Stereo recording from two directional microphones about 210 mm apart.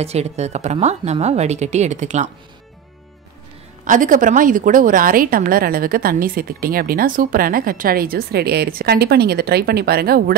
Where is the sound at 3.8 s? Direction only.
40° right (ahead or behind).